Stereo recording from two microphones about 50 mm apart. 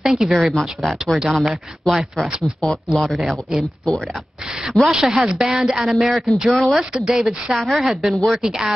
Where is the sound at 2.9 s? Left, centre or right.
Centre.